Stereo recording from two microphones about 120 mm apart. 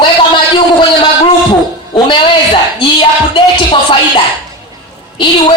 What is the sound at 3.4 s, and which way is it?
Music, 40° left (ahead or behind).